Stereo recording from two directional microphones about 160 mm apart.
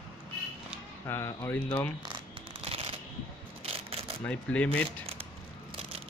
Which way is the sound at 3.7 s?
35° right (ahead or behind).